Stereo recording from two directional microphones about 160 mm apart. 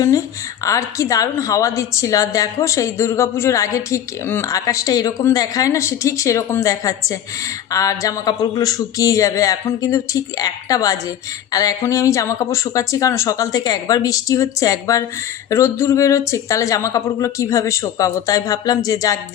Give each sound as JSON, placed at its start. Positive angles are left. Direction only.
{"t": 0.0, "sound": "a woman's voice", "side_deg": 20}